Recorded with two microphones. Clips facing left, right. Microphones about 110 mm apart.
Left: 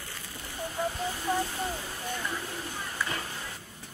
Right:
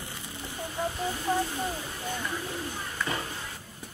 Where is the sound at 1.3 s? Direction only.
20° right (ahead or behind).